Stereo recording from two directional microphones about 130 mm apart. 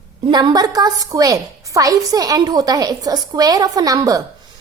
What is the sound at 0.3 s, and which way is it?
A woman's voice, 35° right (ahead or behind).